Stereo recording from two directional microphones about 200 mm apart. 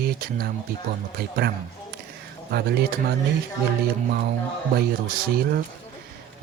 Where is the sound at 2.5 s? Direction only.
55° right (ahead or behind).